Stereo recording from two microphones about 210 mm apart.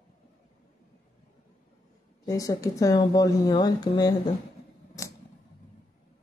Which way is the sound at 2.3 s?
15° left (ahead or behind).